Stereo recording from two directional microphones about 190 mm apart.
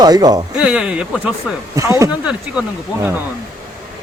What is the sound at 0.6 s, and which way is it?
Speech, 5° right (ahead or behind).